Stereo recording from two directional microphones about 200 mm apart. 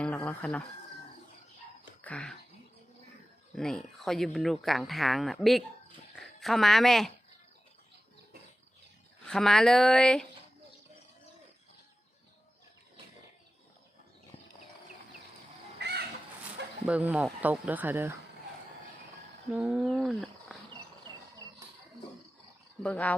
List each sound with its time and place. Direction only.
0.3 s speech: 5° left (ahead or behind)
2.0 s speech: 5° left (ahead or behind)
3.6 s speech: centre (ahead or behind)
9.2 s speech: centre (ahead or behind)
15.8 s crow: 55° right (ahead or behind)
16.8 s speech: 5° right (ahead or behind)
19.5 s roaring cats: 5° right (ahead or behind)
22.8 s speech: 5° left (ahead or behind)